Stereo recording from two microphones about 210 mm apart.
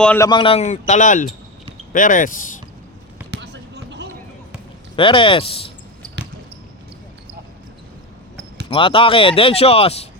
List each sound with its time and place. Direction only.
0.0 s speech: 5° left (ahead or behind)
0.3 s speech: 25° left (ahead or behind)
3.3 s basketball bounce: 55° right (ahead or behind)
4.9 s speech: 25° left (ahead or behind)
8.7 s speech: 25° left (ahead or behind)